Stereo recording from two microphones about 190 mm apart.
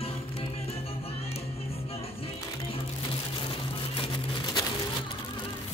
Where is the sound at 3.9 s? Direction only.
25° left (ahead or behind).